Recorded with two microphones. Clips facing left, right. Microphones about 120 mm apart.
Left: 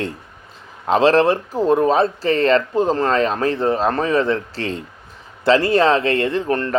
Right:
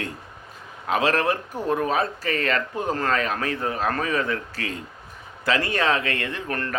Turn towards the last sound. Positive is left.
turn(degrees=25)  # may be behind; listen again after turning